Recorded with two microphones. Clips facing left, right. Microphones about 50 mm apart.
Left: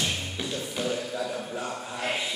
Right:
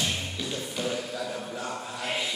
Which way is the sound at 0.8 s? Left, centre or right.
Centre.